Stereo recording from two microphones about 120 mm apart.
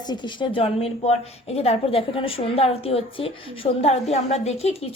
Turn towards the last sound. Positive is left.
turn(degrees=60)  # may be behind; listen again after turning